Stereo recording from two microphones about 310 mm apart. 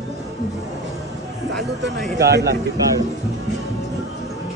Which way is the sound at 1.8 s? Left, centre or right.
Right.